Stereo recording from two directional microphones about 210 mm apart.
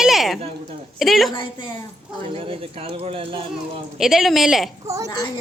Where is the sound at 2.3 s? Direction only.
25° right (ahead or behind).